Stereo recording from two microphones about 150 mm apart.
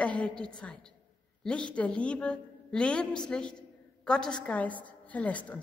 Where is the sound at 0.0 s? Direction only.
5° left (ahead or behind).